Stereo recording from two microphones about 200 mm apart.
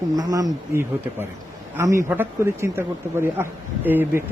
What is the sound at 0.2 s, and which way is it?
Speech, 20° right (ahead or behind).